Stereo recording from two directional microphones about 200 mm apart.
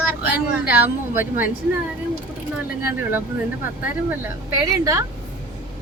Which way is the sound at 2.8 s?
10° right (ahead or behind).